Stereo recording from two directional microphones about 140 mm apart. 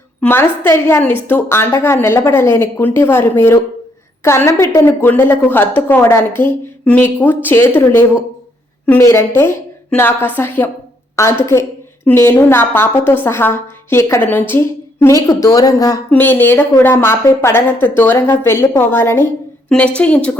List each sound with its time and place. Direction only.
0.2 s a woman's voice: 15° left (ahead or behind)
16.0 s a woman's voice: 15° left (ahead or behind)